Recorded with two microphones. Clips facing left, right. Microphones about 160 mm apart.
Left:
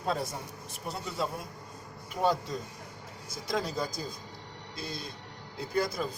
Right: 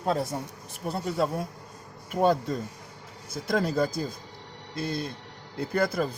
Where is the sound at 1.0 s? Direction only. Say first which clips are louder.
Right 7 dB; 50° right (ahead or behind).